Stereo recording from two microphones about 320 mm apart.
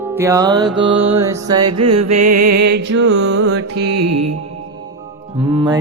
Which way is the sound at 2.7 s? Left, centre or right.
Right.